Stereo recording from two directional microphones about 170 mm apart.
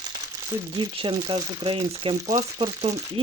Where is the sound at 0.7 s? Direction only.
30° right (ahead or behind).